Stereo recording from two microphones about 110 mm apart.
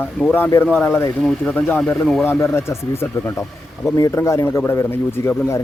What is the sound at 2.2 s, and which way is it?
A man's voice, 20° left (ahead or behind).